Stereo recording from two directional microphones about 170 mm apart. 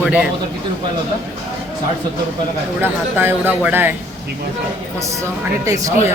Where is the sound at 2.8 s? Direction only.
10° right (ahead or behind).